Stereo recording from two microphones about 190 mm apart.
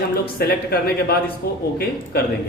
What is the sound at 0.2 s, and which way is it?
A man's voice, 55° left (ahead or behind).